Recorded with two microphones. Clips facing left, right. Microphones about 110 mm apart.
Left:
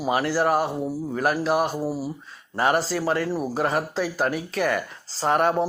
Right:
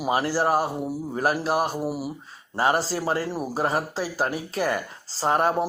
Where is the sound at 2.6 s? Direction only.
35° right (ahead or behind).